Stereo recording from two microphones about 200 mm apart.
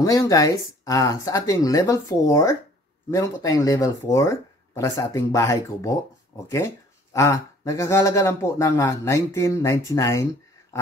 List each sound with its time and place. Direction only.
0.0 s speech: 15° left (ahead or behind)